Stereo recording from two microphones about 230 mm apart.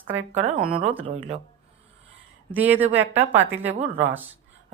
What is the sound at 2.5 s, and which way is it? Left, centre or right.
Speech, centre.